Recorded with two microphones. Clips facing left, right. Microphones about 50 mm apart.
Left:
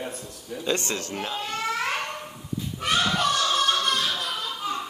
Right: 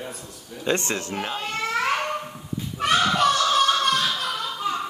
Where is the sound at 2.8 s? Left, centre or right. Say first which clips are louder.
Right 4 dB; right.